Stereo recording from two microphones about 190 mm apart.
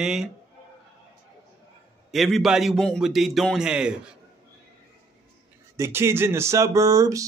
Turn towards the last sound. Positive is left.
turn(degrees=-20)  # may be behind; listen again after turning